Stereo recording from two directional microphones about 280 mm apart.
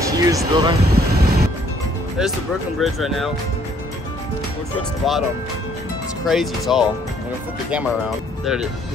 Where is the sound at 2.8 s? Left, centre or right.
Centre.